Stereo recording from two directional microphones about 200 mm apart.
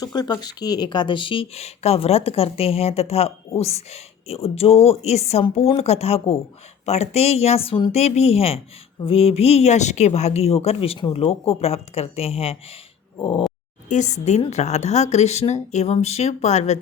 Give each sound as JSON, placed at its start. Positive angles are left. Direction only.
{"t": 0.0, "sound": "speech", "side_deg": 20}
{"t": 13.1, "sound": "a sound", "side_deg": 25}
{"t": 13.8, "sound": "speech", "side_deg": 35}